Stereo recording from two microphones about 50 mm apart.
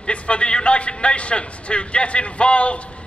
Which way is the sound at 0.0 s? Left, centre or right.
Left.